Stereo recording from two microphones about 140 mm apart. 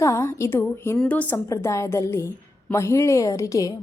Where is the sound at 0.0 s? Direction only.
20° left (ahead or behind).